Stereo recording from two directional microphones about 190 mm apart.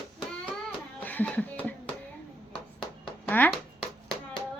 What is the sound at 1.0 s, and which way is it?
Music, 10° left (ahead or behind).